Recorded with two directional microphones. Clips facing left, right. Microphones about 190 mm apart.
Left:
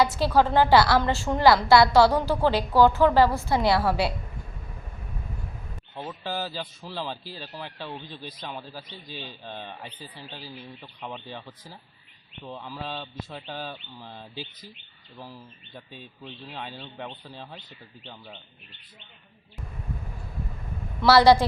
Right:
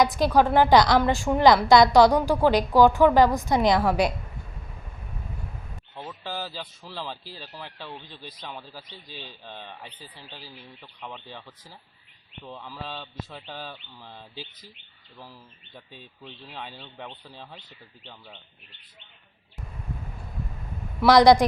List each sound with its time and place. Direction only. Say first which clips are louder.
0.0 s a woman's voice: right 1 dB; 15° right (ahead or behind)
5.9 s speech: left 3 dB; 5° left (ahead or behind)
12.5 s speech: left 2 dB; 5° left (ahead or behind)
16.5 s speech: left 2 dB; centre (ahead or behind)
21.0 s a woman's voice: right 1 dB; 15° right (ahead or behind)